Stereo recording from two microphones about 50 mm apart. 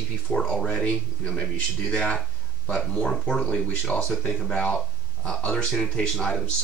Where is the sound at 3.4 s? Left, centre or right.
Centre.